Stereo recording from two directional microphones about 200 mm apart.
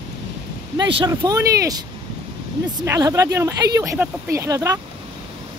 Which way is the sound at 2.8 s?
15° right (ahead or behind).